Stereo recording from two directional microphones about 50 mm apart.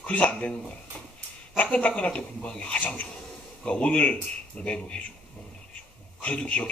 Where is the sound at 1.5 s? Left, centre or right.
Left.